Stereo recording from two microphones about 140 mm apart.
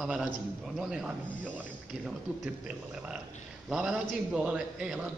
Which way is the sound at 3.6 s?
5° right (ahead or behind).